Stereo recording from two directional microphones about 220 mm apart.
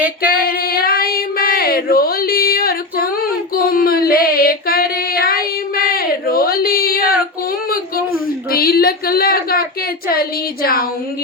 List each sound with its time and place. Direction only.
0.3 s female singing: 45° left (ahead or behind)
7.7 s a sound: 40° left (ahead or behind)
10.1 s speech: 45° left (ahead or behind)